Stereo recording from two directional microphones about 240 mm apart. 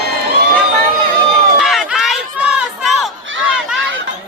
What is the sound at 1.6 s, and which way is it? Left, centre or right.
Crowd, centre.